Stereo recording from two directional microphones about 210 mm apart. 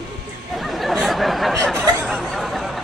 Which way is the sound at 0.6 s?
Centre (ahead or behind).